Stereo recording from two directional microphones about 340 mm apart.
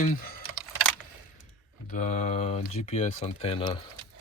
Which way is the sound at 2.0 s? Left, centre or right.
Left.